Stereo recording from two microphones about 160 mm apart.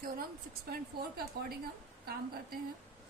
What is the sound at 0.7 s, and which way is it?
Speech, 70° right (ahead or behind).